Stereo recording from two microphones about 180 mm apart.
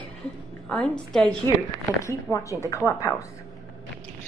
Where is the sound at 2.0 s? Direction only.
15° left (ahead or behind).